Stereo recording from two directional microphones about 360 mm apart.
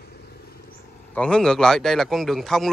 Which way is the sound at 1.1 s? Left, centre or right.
Centre.